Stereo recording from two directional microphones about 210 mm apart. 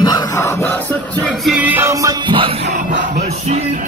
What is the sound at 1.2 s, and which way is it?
Music, centre (ahead or behind).